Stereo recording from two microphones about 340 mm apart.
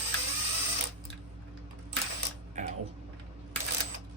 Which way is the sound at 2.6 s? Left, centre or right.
Right.